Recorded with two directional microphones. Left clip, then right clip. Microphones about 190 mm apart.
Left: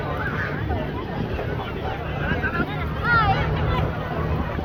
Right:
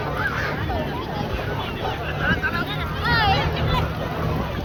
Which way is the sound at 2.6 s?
80° right.